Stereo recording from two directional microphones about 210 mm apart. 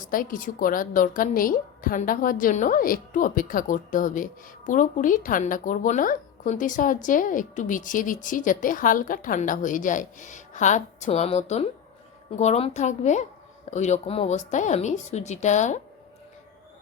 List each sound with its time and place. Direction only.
0.0 s a woman's voice: 40° left (ahead or behind)